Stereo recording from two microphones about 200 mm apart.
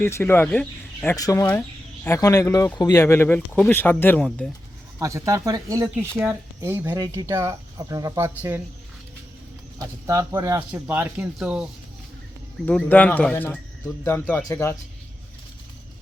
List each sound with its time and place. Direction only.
0.0 s speech: 10° left (ahead or behind)
4.9 s speech: 15° right (ahead or behind)
9.8 s speech: 15° right (ahead or behind)
12.6 s speech: 5° left (ahead or behind)